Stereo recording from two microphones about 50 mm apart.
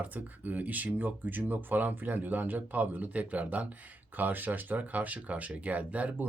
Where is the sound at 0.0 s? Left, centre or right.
Right.